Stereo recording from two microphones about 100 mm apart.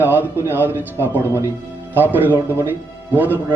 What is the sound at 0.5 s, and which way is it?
A man's voice, 20° right (ahead or behind).